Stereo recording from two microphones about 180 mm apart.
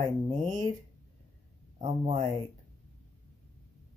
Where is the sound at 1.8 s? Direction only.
35° right (ahead or behind).